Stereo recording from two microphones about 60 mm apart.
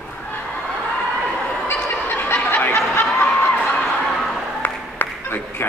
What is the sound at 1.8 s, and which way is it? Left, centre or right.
Fowl, left.